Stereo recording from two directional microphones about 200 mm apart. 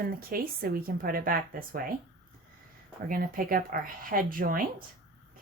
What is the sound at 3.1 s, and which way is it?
Speech, 45° right (ahead or behind).